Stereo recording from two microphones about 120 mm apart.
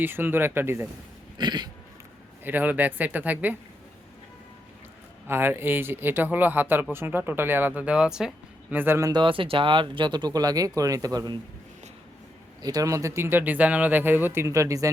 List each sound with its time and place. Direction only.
0.0 s a man's voice: 15° right (ahead or behind)
1.4 s throat clearing: 35° right (ahead or behind)
2.4 s a man's voice: 15° right (ahead or behind)
5.3 s a man's voice: 20° right (ahead or behind)
8.7 s a man's voice: 15° right (ahead or behind)
9.0 s speech: 30° right (ahead or behind)
9.2 s speech: 45° right (ahead or behind)
12.6 s speech: 30° right (ahead or behind)